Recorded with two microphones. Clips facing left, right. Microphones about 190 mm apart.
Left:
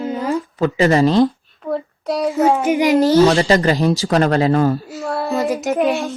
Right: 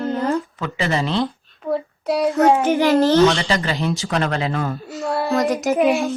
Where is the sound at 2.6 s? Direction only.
15° left (ahead or behind).